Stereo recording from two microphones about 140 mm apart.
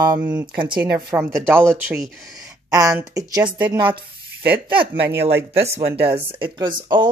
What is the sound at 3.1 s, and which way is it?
Mantra, 25° right (ahead or behind).